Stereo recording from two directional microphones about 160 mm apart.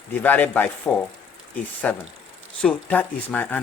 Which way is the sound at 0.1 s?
10° left (ahead or behind).